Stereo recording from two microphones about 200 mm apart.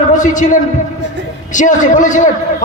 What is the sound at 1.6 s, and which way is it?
Speech, 40° left (ahead or behind).